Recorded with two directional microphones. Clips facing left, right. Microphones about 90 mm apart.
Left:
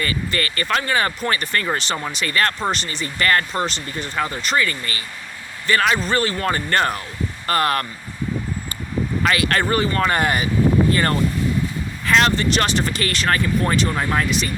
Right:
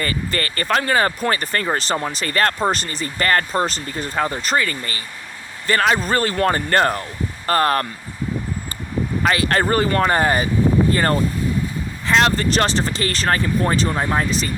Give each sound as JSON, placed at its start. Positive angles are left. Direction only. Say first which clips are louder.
{"t": 0.0, "sound": "speech", "louder": "even", "side_deg": -40}
{"t": 9.2, "sound": "speech", "louder": "right 2 dB", "side_deg": -35}
{"t": 10.1, "sound": "speech", "louder": "right 2 dB", "side_deg": -30}